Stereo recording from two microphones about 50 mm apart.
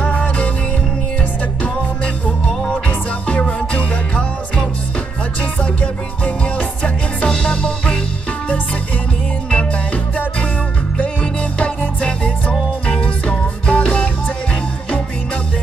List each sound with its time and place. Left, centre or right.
0.0 s music: left
2.9 s music: left
5.4 s music: left
11.5 s music: left